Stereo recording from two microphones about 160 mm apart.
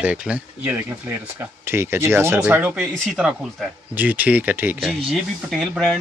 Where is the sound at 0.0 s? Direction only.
5° right (ahead or behind).